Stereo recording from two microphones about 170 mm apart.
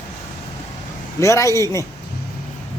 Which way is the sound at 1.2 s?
15° left (ahead or behind).